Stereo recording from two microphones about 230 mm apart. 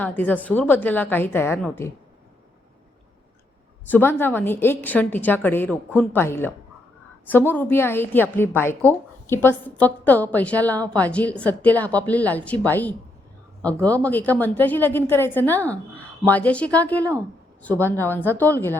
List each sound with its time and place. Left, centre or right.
0.0 s a woman's voice: centre
3.8 s a woman's voice: centre